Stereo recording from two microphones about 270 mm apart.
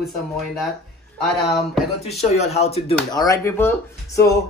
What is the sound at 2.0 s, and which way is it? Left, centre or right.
Speech, left.